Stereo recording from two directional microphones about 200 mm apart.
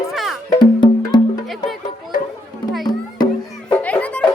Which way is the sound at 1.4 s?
Centre (ahead or behind).